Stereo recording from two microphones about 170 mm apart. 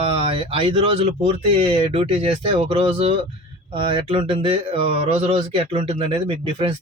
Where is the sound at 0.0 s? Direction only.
30° right (ahead or behind).